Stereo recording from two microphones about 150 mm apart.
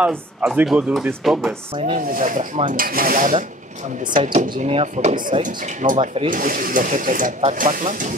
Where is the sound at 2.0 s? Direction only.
60° right (ahead or behind).